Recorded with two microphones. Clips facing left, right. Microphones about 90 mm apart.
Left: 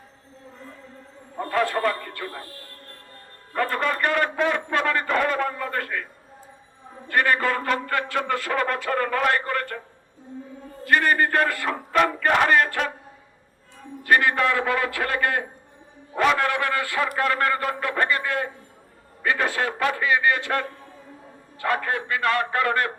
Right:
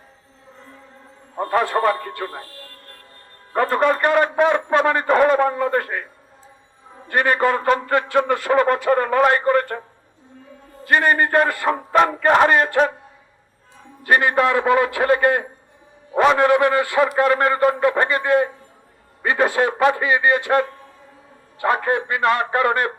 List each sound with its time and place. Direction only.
1.4 s a man's voice: 30° right (ahead or behind)
3.5 s a man's voice: 30° right (ahead or behind)
7.1 s a man's voice: 20° right (ahead or behind)
10.8 s a man's voice: 20° right (ahead or behind)
14.0 s a man's voice: 20° right (ahead or behind)